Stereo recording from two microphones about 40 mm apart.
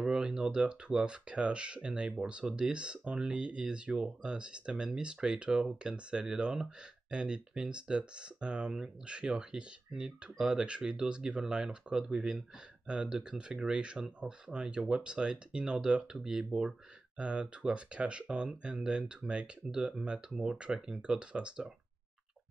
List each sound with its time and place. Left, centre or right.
0.0 s speech: centre
17.2 s speech: right